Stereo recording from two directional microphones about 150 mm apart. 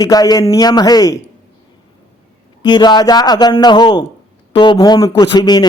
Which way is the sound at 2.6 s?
30° left (ahead or behind).